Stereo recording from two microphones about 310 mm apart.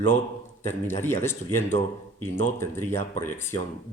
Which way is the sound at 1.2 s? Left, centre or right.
Centre.